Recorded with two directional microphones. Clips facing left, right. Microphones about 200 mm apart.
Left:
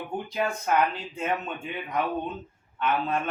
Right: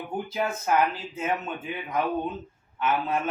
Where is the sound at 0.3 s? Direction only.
5° right (ahead or behind).